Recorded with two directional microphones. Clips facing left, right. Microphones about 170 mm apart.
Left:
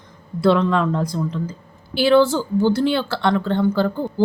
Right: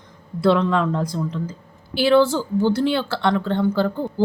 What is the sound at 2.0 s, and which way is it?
Speech, 15° right (ahead or behind).